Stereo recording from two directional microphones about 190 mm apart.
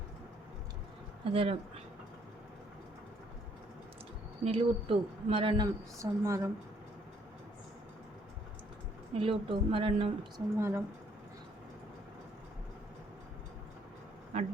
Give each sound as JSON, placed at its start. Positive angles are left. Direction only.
{"t": 1.2, "sound": "a woman's voice", "side_deg": -30}
{"t": 4.4, "sound": "a woman's voice", "side_deg": -30}
{"t": 6.0, "sound": "speech", "side_deg": -15}
{"t": 9.1, "sound": "a woman's voice", "side_deg": -30}
{"t": 10.6, "sound": "speech", "side_deg": -10}